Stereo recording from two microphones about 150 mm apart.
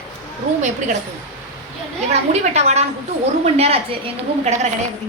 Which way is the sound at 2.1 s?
45° right (ahead or behind).